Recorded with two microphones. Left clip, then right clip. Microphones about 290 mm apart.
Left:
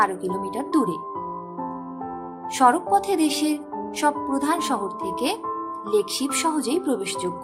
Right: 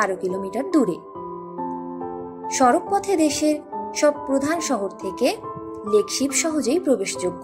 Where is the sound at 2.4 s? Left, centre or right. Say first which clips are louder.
Even; centre.